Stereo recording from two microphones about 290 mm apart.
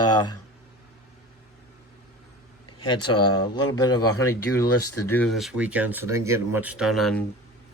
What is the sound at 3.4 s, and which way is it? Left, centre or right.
Speech, centre.